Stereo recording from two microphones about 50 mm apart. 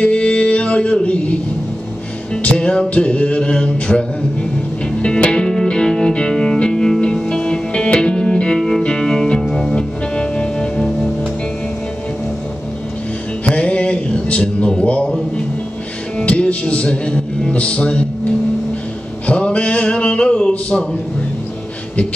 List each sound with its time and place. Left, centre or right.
0.0 s music: left
2.4 s music: left
5.0 s music: centre
13.5 s a sound: left
16.3 s music: left
19.2 s music: left